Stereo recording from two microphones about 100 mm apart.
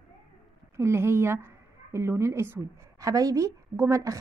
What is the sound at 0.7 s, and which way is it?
Speech, 25° right (ahead or behind).